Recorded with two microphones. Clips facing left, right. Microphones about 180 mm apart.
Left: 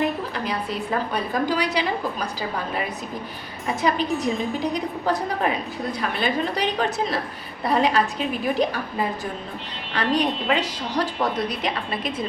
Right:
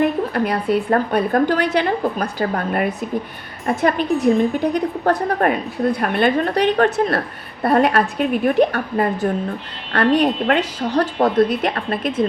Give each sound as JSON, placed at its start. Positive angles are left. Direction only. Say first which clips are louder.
{"t": 0.0, "sound": "a woman's voice", "louder": "right 7 dB", "side_deg": -55}